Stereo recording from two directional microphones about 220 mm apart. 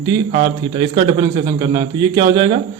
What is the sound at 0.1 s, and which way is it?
A man's voice, 25° right (ahead or behind).